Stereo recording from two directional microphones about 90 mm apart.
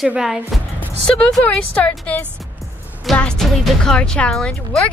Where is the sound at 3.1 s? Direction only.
10° left (ahead or behind).